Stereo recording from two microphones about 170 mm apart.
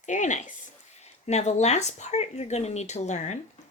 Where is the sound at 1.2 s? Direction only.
40° left (ahead or behind).